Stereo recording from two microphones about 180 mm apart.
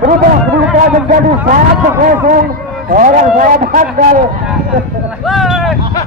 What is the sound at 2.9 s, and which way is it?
A man's voice, 45° right (ahead or behind).